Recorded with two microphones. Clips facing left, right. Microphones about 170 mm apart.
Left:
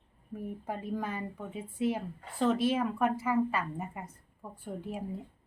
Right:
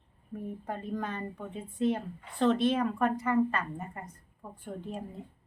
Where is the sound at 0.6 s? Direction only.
5° left (ahead or behind).